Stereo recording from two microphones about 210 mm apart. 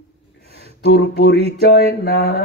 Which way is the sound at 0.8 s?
50° left (ahead or behind).